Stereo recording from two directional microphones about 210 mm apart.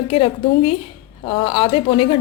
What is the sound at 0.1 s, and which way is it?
A woman's voice, 25° left (ahead or behind).